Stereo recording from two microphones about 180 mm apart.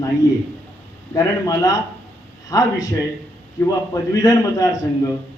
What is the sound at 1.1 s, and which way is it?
A man's voice, 20° left (ahead or behind).